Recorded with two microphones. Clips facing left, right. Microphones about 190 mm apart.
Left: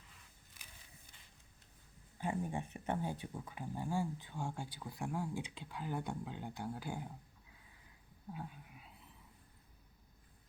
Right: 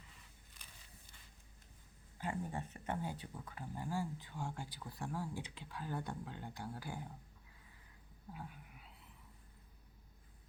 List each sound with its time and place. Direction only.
0.6 s a sound: 5° left (ahead or behind)
2.2 s speech: 10° left (ahead or behind)
8.4 s speech: 20° left (ahead or behind)